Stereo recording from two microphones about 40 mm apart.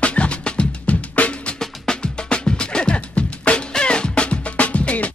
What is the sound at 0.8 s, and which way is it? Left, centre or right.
Music, left.